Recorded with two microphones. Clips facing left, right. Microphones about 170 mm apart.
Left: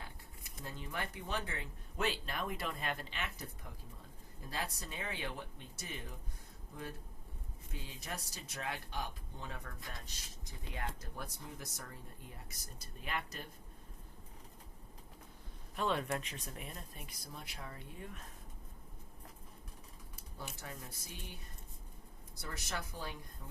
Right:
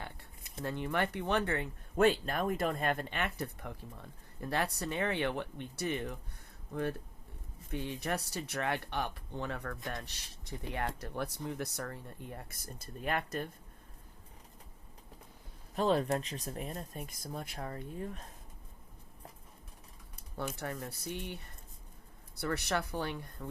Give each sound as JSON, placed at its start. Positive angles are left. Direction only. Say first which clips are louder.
{"t": 0.6, "sound": "speech", "louder": "right 10 dB", "side_deg": -65}
{"t": 15.7, "sound": "speech", "louder": "right 6 dB", "side_deg": -35}
{"t": 20.3, "sound": "speech", "louder": "right 10 dB", "side_deg": -65}